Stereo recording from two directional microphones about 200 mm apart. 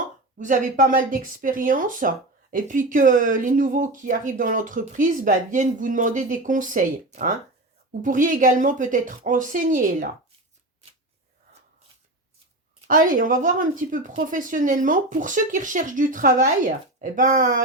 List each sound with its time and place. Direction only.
0.3 s speech: 40° right (ahead or behind)
12.9 s speech: 40° right (ahead or behind)